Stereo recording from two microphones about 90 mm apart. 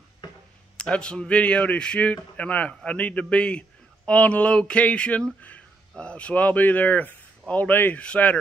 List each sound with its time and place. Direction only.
0.7 s speech: 10° left (ahead or behind)